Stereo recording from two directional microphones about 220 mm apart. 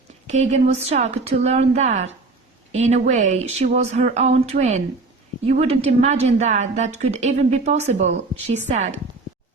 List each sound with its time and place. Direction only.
0.3 s a woman's voice: 30° right (ahead or behind)